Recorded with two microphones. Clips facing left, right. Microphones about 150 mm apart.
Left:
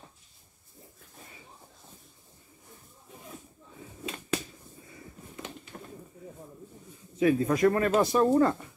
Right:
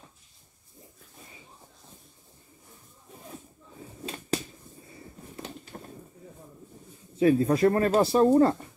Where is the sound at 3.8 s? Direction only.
35° right (ahead or behind).